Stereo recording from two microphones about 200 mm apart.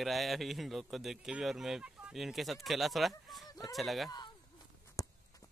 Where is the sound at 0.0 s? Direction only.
Centre (ahead or behind).